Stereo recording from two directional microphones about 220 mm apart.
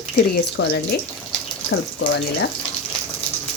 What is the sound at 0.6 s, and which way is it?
Speech, 45° left (ahead or behind).